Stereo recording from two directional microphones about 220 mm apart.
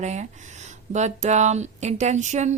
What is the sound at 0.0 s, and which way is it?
Speech, 30° right (ahead or behind).